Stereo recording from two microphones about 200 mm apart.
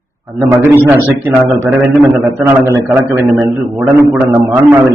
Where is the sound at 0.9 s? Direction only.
10° right (ahead or behind).